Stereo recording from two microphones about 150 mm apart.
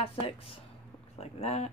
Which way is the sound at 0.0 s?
40° left (ahead or behind).